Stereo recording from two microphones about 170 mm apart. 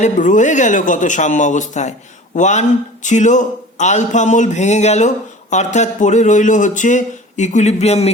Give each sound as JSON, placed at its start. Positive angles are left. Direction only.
{"t": 0.0, "sound": "speech", "side_deg": 45}